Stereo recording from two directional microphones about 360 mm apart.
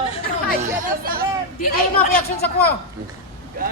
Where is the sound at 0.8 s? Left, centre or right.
Right.